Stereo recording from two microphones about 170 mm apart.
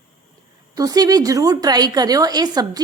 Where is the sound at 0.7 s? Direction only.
20° right (ahead or behind).